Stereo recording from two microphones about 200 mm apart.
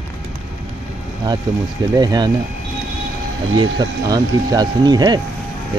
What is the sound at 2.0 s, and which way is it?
Speech, 20° right (ahead or behind).